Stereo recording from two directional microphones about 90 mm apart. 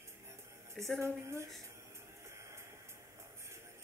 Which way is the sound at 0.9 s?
30° right (ahead or behind).